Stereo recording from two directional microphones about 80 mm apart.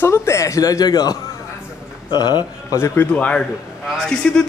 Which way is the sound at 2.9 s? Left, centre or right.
Left.